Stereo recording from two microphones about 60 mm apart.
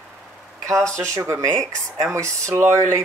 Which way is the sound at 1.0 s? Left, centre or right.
Right.